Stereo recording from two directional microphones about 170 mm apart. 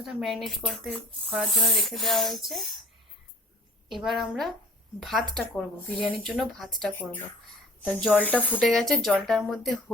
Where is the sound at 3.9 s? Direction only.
Centre (ahead or behind).